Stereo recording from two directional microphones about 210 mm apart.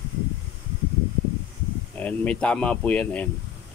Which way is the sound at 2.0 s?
5° left (ahead or behind).